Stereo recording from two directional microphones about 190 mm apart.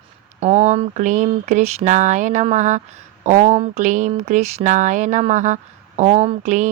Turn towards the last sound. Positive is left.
turn(degrees=-40)  # may be behind; listen again after turning